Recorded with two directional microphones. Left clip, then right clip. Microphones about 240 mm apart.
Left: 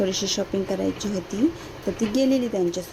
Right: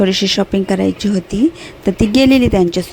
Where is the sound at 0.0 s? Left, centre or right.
Right.